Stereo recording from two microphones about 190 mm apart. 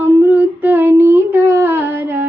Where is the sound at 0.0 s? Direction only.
10° right (ahead or behind).